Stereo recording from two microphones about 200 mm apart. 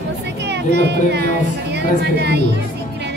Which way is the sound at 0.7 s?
55° right (ahead or behind).